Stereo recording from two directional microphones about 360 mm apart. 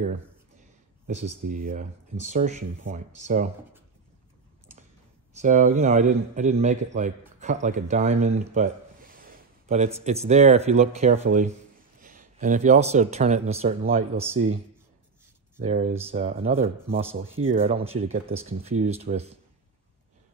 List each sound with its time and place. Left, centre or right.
1.0 s speech: right
5.3 s speech: centre
14.3 s speech: right
15.6 s speech: centre